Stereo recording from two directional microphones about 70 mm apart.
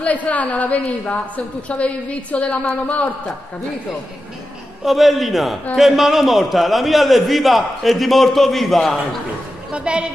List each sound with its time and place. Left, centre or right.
0.0 s a woman's voice: left
4.8 s a man's voice: centre
9.7 s a woman's voice: centre